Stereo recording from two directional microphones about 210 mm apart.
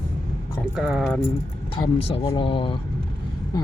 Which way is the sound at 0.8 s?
5° right (ahead or behind).